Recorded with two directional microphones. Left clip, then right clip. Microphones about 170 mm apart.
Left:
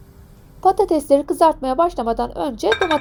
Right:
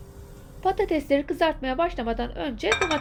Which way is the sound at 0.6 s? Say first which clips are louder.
Left 8 dB; 40° left (ahead or behind).